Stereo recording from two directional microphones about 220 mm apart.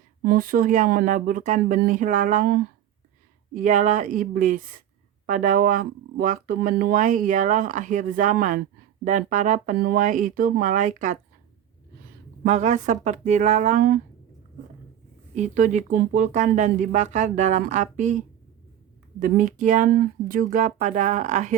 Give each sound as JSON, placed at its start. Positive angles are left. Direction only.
{"t": 0.2, "sound": "speech", "side_deg": -40}
{"t": 12.4, "sound": "speech", "side_deg": -30}
{"t": 15.4, "sound": "speech", "side_deg": -35}
{"t": 19.2, "sound": "speech", "side_deg": -35}